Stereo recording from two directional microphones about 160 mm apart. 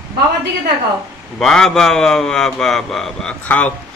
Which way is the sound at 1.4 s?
Centre (ahead or behind).